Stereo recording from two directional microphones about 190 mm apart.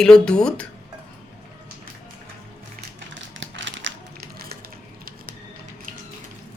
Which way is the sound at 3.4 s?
75° right (ahead or behind).